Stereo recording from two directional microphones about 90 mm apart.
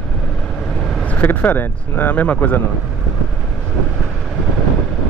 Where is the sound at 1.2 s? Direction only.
20° left (ahead or behind).